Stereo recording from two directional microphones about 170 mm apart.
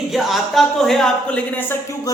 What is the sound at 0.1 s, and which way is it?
Speech, centre (ahead or behind).